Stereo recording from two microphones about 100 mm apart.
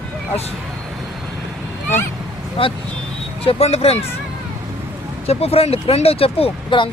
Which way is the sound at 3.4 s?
85° left.